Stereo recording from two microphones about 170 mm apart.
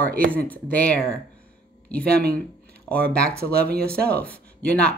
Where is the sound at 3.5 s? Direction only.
65° right (ahead or behind).